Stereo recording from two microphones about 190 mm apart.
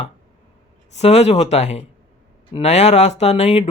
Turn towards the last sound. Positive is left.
turn(degrees=35)  # may be behind; listen again after turning